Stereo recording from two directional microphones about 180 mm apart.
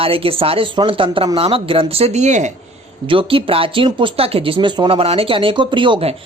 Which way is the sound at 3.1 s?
30° right (ahead or behind).